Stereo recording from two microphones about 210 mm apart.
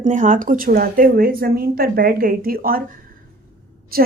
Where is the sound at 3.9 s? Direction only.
45° right (ahead or behind).